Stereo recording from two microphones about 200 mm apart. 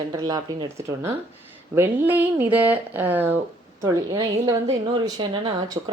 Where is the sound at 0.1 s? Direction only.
20° right (ahead or behind).